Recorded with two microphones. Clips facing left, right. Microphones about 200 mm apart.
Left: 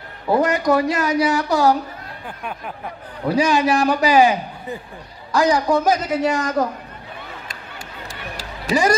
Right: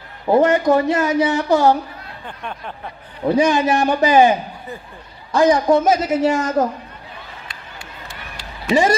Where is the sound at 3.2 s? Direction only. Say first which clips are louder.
Right 3 dB; 20° right (ahead or behind).